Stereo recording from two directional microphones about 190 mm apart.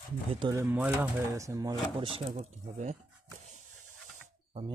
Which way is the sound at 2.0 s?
30° right (ahead or behind).